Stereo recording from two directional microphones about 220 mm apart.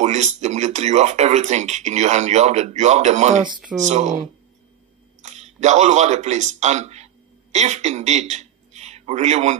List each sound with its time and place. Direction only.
0.0 s speech: 30° right (ahead or behind)